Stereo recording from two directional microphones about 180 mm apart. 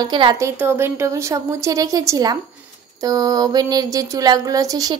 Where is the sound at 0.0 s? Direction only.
25° right (ahead or behind).